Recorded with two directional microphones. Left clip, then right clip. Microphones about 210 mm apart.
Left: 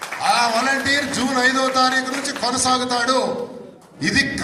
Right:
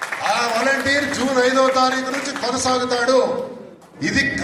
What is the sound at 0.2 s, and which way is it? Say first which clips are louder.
A man's voice: left 2 dB; 55° left (ahead or behind).